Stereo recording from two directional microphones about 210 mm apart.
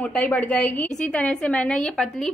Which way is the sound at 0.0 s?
5° left (ahead or behind).